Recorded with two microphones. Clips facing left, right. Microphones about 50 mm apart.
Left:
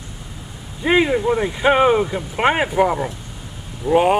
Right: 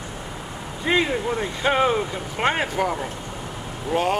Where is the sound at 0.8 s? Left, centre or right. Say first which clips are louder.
Left 6 dB; centre.